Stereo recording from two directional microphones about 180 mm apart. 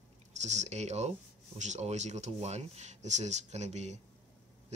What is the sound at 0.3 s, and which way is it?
Speech, 40° right (ahead or behind).